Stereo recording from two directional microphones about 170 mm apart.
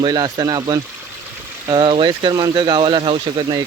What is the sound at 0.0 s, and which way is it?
Speech, 25° right (ahead or behind).